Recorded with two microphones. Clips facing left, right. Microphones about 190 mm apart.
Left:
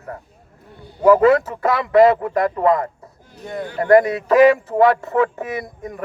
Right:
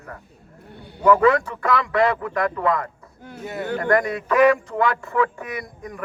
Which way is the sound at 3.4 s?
5° right (ahead or behind).